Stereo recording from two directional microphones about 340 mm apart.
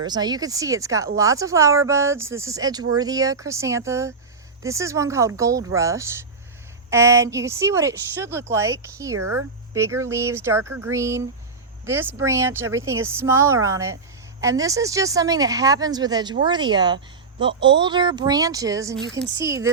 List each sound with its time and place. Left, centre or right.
0.0 s speech: centre
9.1 s speech: right
9.7 s speech: centre